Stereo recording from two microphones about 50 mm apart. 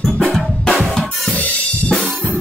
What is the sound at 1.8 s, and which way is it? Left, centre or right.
Drum kit, centre.